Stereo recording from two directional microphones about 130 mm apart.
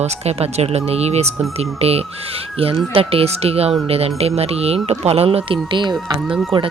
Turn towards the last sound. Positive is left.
turn(degrees=0)  # may be behind; listen again after turning